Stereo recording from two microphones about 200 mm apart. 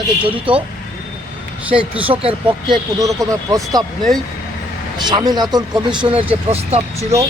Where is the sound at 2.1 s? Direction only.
25° right (ahead or behind).